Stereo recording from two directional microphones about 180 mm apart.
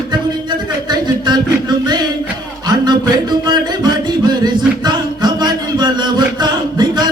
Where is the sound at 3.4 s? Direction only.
25° right (ahead or behind).